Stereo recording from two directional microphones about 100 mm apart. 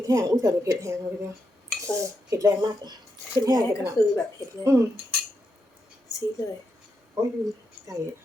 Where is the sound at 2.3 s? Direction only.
35° right (ahead or behind).